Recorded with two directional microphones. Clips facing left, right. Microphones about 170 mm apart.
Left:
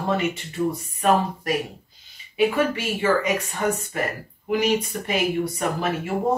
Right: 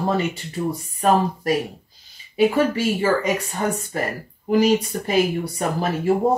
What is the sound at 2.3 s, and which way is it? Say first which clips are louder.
Speech: right 3 dB; 35° right (ahead or behind).